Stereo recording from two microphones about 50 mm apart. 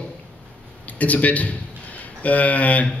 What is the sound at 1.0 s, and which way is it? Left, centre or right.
A man's voice, left.